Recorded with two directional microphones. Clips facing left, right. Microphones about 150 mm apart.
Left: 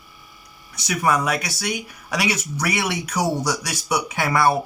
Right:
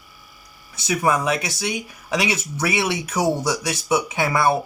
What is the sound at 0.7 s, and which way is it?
Speech, 25° right (ahead or behind).